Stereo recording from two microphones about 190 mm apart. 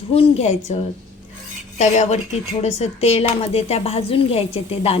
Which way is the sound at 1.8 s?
35° left (ahead or behind).